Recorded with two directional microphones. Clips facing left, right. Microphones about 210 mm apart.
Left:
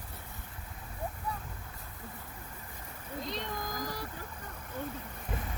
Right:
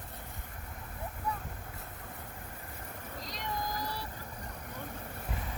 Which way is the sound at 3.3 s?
45° left (ahead or behind).